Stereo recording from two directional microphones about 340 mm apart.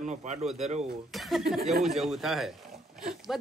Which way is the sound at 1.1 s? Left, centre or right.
Centre.